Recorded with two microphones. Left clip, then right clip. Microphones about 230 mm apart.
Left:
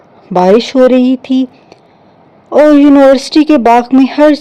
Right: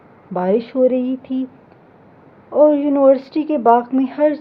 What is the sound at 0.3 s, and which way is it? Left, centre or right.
Speech, left.